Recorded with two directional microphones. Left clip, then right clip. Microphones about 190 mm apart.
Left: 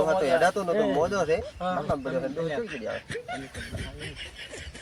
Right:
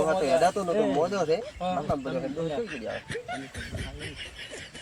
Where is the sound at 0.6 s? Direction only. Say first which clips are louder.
Left 1 dB; 20° left (ahead or behind).